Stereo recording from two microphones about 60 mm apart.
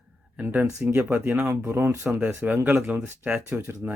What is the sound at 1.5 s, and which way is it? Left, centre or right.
Speech, right.